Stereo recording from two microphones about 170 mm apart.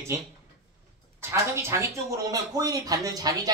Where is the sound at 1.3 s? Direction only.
15° right (ahead or behind).